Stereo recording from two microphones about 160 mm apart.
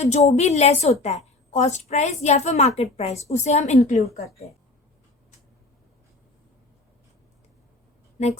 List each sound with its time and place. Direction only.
0.0 s a woman's voice: 45° left (ahead or behind)